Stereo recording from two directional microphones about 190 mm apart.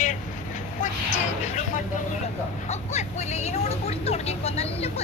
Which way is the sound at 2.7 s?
35° left (ahead or behind).